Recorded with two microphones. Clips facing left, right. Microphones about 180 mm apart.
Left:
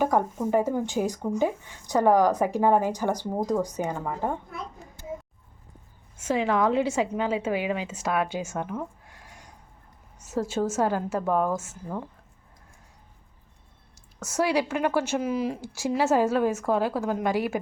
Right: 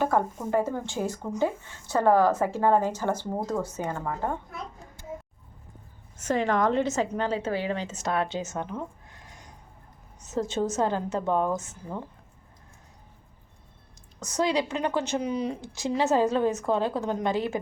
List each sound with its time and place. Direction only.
0.0 s a woman's voice: 15° left (ahead or behind)
6.1 s a woman's voice: 5° left (ahead or behind)
11.2 s a woman's voice: 25° right (ahead or behind)
11.4 s speech: 5° left (ahead or behind)
14.3 s a woman's voice: 10° left (ahead or behind)